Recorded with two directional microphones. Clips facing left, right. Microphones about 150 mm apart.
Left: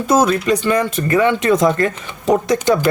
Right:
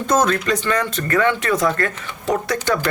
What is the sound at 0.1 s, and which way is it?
Speech, 10° left (ahead or behind).